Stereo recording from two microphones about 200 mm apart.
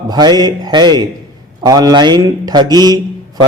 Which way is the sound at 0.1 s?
20° right (ahead or behind).